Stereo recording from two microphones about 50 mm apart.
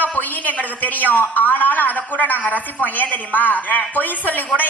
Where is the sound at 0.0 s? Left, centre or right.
Left.